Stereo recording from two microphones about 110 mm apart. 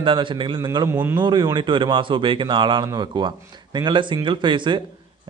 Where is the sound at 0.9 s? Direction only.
20° right (ahead or behind).